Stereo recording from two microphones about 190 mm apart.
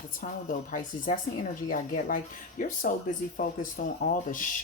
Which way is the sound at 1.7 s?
45° left (ahead or behind).